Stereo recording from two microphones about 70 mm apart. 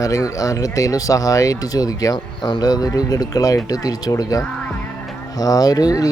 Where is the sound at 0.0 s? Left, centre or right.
Left.